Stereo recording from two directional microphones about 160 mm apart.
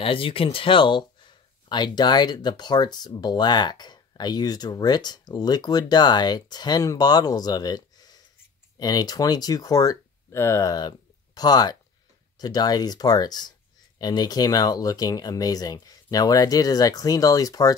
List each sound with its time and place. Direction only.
0.0 s speech: 35° left (ahead or behind)